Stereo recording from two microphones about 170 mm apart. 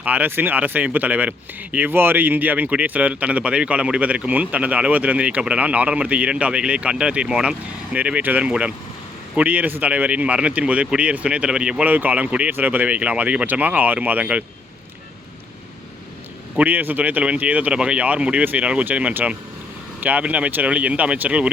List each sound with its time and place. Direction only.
0.0 s speech: 10° right (ahead or behind)
16.6 s speech: 10° right (ahead or behind)